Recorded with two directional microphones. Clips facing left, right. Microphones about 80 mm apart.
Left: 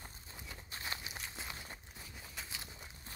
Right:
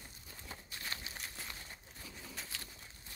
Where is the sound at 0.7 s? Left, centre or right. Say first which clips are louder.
Left 3 dB; left.